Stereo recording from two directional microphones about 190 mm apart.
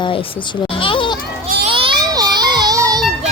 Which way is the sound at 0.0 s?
25° left (ahead or behind).